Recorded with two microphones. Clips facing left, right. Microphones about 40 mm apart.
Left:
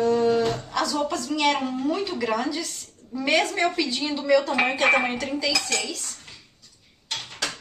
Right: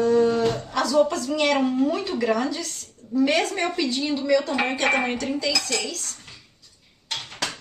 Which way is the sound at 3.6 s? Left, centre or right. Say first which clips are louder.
Left 1 dB; centre.